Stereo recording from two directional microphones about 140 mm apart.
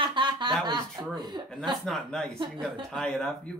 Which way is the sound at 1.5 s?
Centre (ahead or behind).